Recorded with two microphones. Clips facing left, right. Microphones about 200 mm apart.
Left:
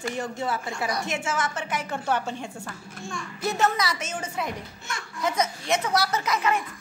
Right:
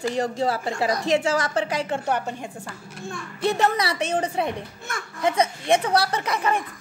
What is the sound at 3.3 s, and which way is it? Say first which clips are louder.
A woman's voice: right 3 dB; 30° right (ahead or behind).